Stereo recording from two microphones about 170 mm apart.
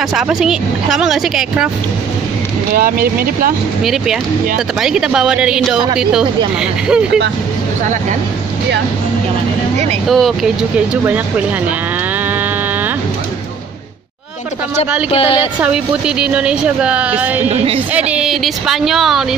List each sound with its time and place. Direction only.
0.1 s speech: 5° right (ahead or behind)
2.7 s speech: 60° right (ahead or behind)
3.8 s speech: centre (ahead or behind)
10.0 s a woman's voice: centre (ahead or behind)
15.6 s a woman's voice: 5° right (ahead or behind)